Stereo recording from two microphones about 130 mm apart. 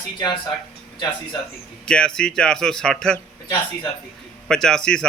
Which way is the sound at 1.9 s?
5° left (ahead or behind).